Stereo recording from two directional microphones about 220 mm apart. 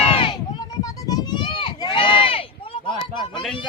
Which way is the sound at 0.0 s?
25° left (ahead or behind).